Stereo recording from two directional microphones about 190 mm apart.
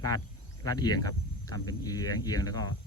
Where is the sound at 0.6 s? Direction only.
20° left (ahead or behind).